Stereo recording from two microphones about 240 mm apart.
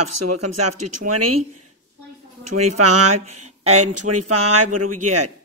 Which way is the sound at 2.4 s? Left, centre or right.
Right.